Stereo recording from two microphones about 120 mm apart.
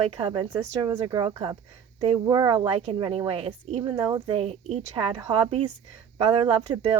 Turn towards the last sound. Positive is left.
turn(degrees=-45)  # may be behind; listen again after turning